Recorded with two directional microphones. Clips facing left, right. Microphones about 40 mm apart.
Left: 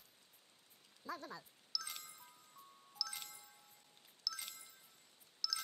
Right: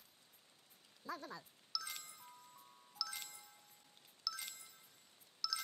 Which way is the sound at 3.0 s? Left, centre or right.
Centre.